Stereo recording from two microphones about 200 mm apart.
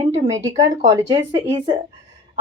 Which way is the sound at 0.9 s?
25° right (ahead or behind).